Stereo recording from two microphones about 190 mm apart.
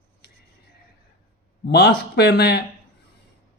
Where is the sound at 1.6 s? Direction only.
60° left (ahead or behind).